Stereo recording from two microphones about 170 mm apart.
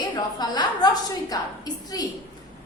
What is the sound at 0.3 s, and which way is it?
A woman's voice, 25° left (ahead or behind).